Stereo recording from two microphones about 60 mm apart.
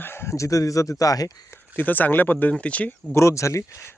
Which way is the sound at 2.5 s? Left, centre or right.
Left.